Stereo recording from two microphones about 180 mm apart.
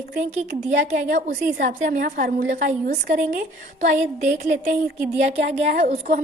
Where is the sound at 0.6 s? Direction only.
45° right (ahead or behind).